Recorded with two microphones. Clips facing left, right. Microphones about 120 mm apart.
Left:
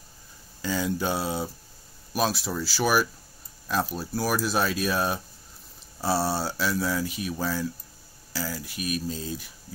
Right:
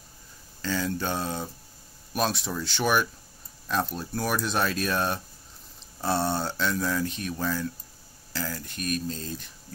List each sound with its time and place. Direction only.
0.6 s speech: 10° left (ahead or behind)